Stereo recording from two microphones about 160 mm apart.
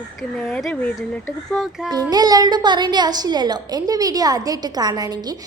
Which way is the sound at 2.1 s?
25° right (ahead or behind).